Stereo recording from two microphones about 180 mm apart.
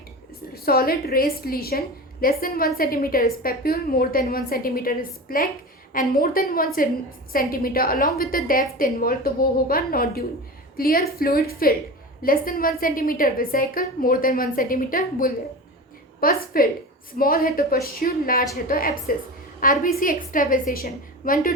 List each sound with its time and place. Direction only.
0.5 s a woman's voice: 55° left (ahead or behind)